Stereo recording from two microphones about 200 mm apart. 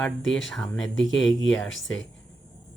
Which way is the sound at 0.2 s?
70° left (ahead or behind).